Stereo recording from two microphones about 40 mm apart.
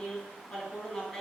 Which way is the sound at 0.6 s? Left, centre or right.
Centre.